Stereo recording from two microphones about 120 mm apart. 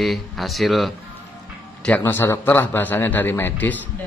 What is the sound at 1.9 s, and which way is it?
Speech, 15° left (ahead or behind).